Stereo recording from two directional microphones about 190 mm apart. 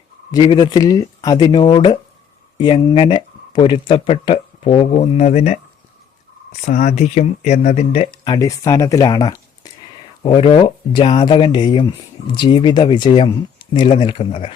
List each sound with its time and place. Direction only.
0.3 s speech: 20° left (ahead or behind)